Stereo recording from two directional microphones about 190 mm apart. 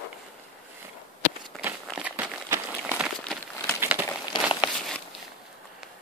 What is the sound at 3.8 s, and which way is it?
Crumpling, 10° right (ahead or behind).